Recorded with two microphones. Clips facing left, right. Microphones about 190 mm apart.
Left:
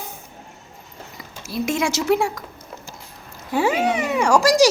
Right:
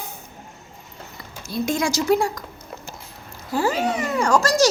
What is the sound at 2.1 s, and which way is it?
Speech, 5° left (ahead or behind).